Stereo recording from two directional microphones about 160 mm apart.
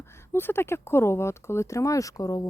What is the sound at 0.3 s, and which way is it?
Speech, 15° left (ahead or behind).